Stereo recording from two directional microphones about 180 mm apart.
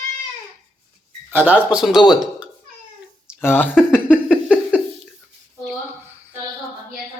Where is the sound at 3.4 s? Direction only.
10° left (ahead or behind).